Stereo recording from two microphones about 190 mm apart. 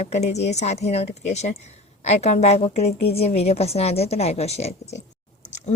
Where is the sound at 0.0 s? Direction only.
35° left (ahead or behind).